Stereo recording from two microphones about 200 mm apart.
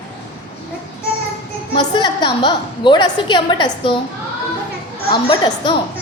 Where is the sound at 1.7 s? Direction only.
20° left (ahead or behind).